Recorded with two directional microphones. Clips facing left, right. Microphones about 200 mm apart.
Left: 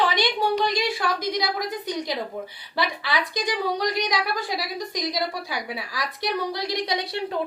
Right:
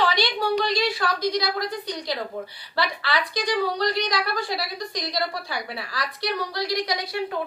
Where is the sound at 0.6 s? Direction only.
15° left (ahead or behind).